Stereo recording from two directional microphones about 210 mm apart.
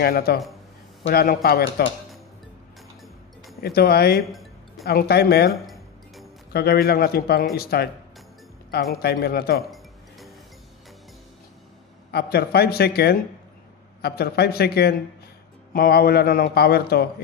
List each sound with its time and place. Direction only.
0.0 s a man's voice: 45° left (ahead or behind)
3.6 s a man's voice: 45° left (ahead or behind)
4.3 s music: centre (ahead or behind)
4.8 s a man's voice: 50° left (ahead or behind)
5.5 s a sound: centre (ahead or behind)
6.5 s a man's voice: 50° left (ahead or behind)
9.0 s a man's voice: 50° left (ahead or behind)
9.7 s music: centre (ahead or behind)
12.1 s a man's voice: 50° left (ahead or behind)